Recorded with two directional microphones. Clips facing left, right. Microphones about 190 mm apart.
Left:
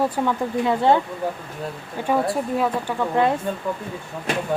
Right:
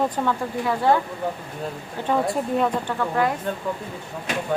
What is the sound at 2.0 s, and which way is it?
Speech, centre (ahead or behind).